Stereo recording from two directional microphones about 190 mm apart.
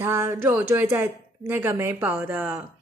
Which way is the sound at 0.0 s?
15° right (ahead or behind).